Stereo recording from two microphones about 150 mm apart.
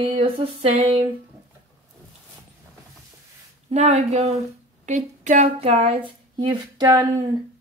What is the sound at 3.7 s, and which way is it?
Speech, 45° right (ahead or behind).